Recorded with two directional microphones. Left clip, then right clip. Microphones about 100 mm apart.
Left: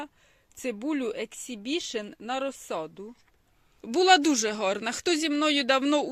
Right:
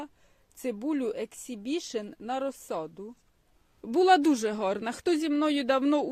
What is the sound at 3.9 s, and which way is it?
Speech, 35° right (ahead or behind).